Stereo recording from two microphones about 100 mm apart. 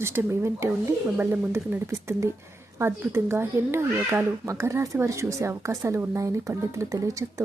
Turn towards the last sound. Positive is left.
turn(degrees=-35)  # may be behind; listen again after turning